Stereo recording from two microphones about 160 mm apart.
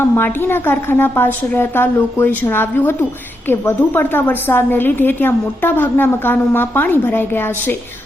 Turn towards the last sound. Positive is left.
turn(degrees=15)  # may be behind; listen again after turning